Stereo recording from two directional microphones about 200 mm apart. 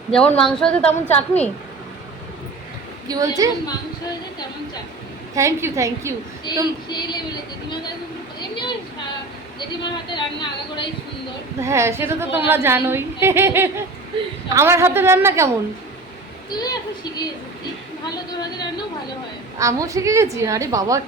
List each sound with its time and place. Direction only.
0.1 s a woman's voice: 5° left (ahead or behind)
3.1 s a woman's voice: 15° right (ahead or behind)
5.3 s a woman's voice: 15° right (ahead or behind)
6.8 s speech: 20° left (ahead or behind)
8.4 s a sound: 25° left (ahead or behind)
9.8 s speech: 25° left (ahead or behind)
11.6 s a woman's voice: 15° right (ahead or behind)
16.5 s speech: 20° left (ahead or behind)
18.3 s speech: 20° left (ahead or behind)
19.5 s a woman's voice: 15° right (ahead or behind)